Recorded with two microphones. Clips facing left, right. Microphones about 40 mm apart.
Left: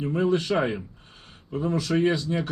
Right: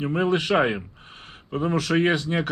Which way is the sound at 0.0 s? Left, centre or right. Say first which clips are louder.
Right 1 dB; right.